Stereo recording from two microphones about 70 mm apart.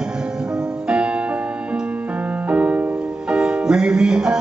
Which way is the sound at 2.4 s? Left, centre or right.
Centre.